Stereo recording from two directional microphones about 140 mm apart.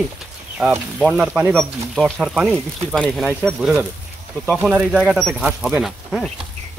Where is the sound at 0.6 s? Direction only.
Centre (ahead or behind).